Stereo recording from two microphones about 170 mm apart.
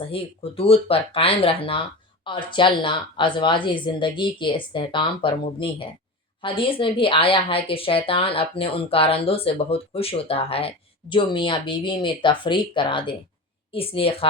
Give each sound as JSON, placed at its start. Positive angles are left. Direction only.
{"t": 0.1, "sound": "a woman's voice", "side_deg": 35}